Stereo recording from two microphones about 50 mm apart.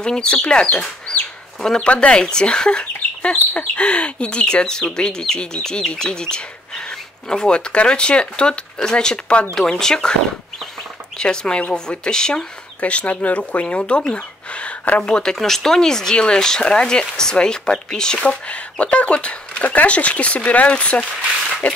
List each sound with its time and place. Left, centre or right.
0.0 s speech: centre
1.9 s speech: left
9.6 s speech: centre
11.1 s speech: centre
12.8 s speech: left
15.0 s speech: centre
15.3 s speech: centre
18.2 s speech: left